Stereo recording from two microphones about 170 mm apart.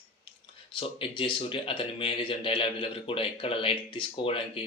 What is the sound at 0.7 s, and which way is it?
Speech, 30° left (ahead or behind).